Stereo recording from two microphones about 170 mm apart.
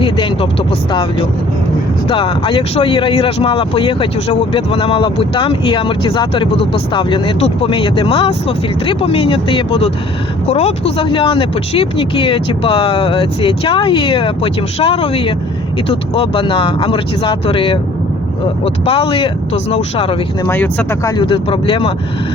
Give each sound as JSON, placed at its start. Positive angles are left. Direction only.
{"t": 2.0, "sound": "speech", "side_deg": 30}
{"t": 20.5, "sound": "speech", "side_deg": 10}
{"t": 21.2, "sound": "speech", "side_deg": 30}